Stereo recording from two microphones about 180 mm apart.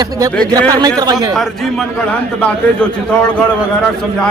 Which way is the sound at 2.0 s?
5° left (ahead or behind).